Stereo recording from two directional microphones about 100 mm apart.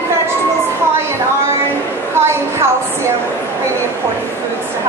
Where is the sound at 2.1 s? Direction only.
25° right (ahead or behind).